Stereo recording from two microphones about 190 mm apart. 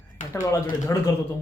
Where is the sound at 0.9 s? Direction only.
15° left (ahead or behind).